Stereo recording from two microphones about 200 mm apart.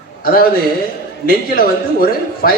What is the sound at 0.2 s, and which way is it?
A man's voice, 50° left (ahead or behind).